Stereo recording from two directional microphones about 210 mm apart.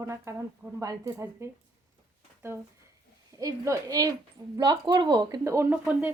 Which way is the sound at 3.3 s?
15° right (ahead or behind).